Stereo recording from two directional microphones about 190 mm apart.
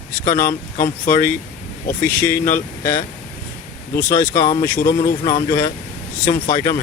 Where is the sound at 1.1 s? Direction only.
15° left (ahead or behind).